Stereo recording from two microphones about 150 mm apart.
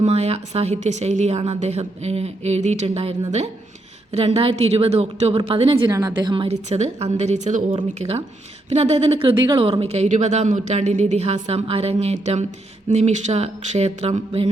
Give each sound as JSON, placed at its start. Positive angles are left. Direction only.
{"t": 0.0, "sound": "a woman's voice", "side_deg": -45}
{"t": 5.9, "sound": "a woman's voice", "side_deg": -25}
{"t": 6.7, "sound": "speech", "side_deg": -45}
{"t": 7.9, "sound": "a woman's voice", "side_deg": -40}